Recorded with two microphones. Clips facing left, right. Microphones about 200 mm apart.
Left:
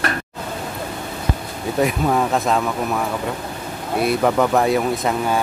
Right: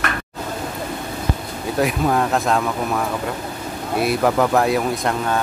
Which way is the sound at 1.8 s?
Centre (ahead or behind).